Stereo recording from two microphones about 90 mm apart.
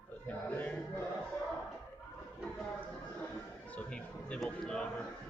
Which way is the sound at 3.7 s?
10° left (ahead or behind).